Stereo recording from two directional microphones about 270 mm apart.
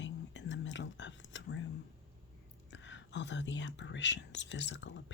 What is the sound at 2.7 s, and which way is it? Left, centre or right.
Speech, left.